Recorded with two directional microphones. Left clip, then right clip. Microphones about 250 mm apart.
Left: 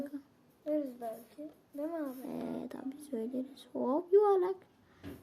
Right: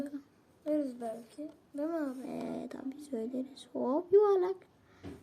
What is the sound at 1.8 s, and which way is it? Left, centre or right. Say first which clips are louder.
Speech: right 3 dB; centre.